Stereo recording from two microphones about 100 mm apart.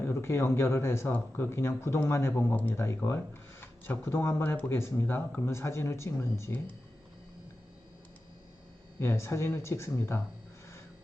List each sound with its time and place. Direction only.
0.0 s speech: 25° left (ahead or behind)
9.0 s speech: 25° left (ahead or behind)